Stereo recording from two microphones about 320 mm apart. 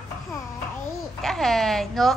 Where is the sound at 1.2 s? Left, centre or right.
Centre.